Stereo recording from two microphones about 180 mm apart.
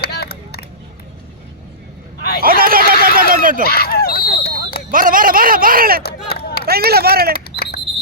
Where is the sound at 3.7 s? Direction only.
60° left (ahead or behind).